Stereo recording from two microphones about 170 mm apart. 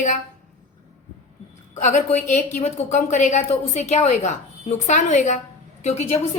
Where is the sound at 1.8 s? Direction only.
45° left (ahead or behind).